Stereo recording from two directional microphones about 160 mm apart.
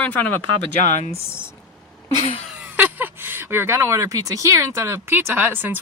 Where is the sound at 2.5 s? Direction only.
10° right (ahead or behind).